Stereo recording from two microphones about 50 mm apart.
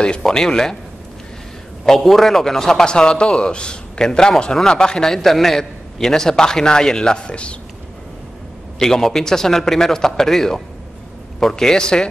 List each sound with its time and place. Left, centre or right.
0.2 s a man's voice: centre
2.0 s a man's voice: centre; by 7.5 s left
8.7 s a man's voice: centre